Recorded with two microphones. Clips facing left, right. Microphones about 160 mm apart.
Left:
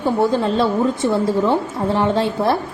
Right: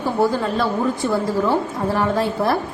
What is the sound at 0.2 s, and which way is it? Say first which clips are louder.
A woman's voice: left 1 dB; 25° left (ahead or behind).